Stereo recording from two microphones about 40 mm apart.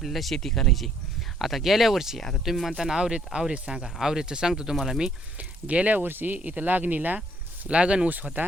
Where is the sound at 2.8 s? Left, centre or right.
Centre.